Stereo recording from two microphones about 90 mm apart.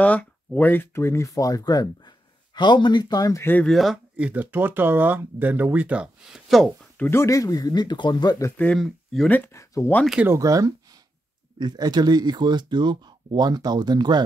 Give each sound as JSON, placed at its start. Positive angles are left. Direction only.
{"t": 0.0, "sound": "speech", "side_deg": 15}
{"t": 3.6, "sound": "speech", "side_deg": 0}
{"t": 4.2, "sound": "speech", "side_deg": -20}
{"t": 6.2, "sound": "speech", "side_deg": -5}
{"t": 7.0, "sound": "speech", "side_deg": 30}
{"t": 8.7, "sound": "speech", "side_deg": 0}
{"t": 9.3, "sound": "speech", "side_deg": 20}
{"t": 9.6, "sound": "speech", "side_deg": 35}
{"t": 10.2, "sound": "speech", "side_deg": -35}
{"t": 11.5, "sound": "speech", "side_deg": -55}